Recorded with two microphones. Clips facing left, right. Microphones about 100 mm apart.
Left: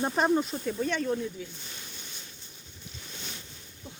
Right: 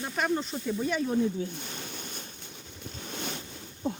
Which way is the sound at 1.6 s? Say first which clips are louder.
Right 6 dB; 55° right (ahead or behind).